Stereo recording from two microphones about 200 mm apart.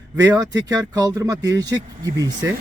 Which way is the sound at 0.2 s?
20° right (ahead or behind).